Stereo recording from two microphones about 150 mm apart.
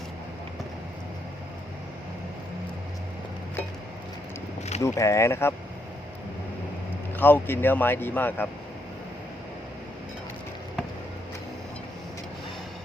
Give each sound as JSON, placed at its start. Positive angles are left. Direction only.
{"t": 4.8, "sound": "speech", "side_deg": 20}
{"t": 7.2, "sound": "speech", "side_deg": 15}